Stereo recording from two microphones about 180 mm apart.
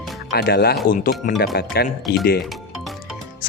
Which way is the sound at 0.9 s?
50° left (ahead or behind).